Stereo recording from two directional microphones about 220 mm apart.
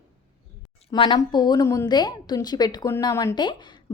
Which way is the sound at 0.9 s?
20° left (ahead or behind).